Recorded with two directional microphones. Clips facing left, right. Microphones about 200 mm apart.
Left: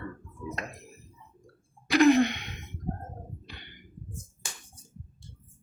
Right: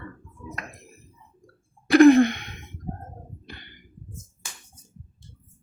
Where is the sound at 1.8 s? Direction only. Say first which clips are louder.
Right 7 dB; 50° right (ahead or behind).